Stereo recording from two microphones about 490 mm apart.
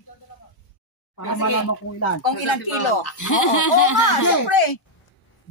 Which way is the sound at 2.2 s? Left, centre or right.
Left.